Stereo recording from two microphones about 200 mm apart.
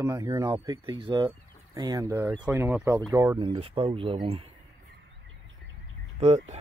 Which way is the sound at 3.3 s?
25° right (ahead or behind).